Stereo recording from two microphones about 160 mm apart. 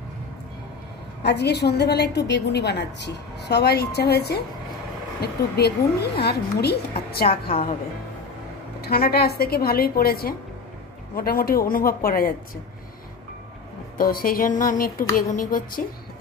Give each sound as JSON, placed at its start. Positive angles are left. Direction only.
{"t": 1.2, "sound": "a woman's voice", "side_deg": 90}
{"t": 7.2, "sound": "a woman's voice", "side_deg": 35}
{"t": 8.8, "sound": "a woman's voice", "side_deg": 75}
{"t": 13.9, "sound": "speech", "side_deg": 65}